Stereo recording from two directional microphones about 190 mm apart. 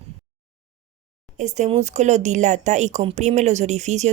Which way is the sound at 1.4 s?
40° right (ahead or behind).